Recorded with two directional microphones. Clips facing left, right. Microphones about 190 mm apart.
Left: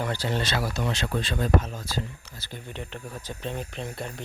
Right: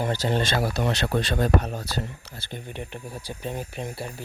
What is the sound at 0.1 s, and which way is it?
Speech, 45° right (ahead or behind).